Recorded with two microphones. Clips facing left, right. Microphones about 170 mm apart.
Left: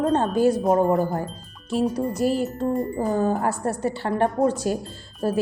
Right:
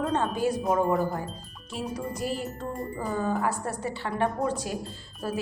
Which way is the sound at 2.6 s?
40° left (ahead or behind).